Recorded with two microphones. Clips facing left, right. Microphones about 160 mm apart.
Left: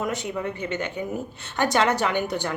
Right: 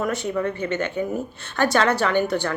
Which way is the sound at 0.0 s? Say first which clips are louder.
Right 4 dB; 15° left (ahead or behind).